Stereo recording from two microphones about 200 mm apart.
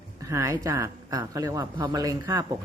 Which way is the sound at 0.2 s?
15° right (ahead or behind).